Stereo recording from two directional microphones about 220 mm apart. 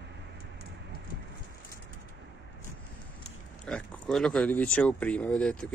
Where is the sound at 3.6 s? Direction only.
5° left (ahead or behind).